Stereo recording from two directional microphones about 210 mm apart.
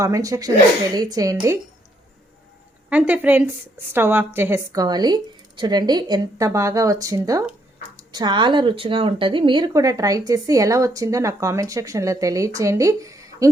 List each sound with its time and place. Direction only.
0.0 s a woman's voice: 15° right (ahead or behind)
2.9 s a woman's voice: 10° right (ahead or behind)